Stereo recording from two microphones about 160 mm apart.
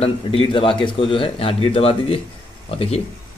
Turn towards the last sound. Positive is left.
turn(degrees=40)  # may be behind; listen again after turning